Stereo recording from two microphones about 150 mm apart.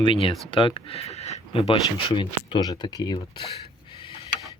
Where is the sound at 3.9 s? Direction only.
35° left (ahead or behind).